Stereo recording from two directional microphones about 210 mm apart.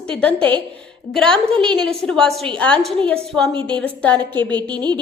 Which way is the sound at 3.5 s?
25° right (ahead or behind).